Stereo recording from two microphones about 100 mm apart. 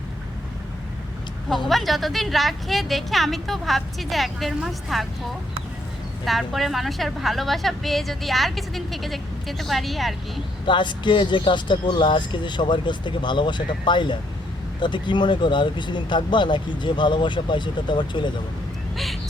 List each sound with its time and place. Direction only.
1.5 s a woman's voice: centre (ahead or behind)
6.2 s a woman's voice: centre (ahead or behind)
10.7 s speech: 50° left (ahead or behind)